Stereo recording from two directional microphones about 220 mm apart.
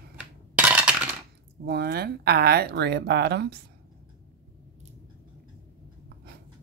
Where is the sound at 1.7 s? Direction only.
45° right (ahead or behind).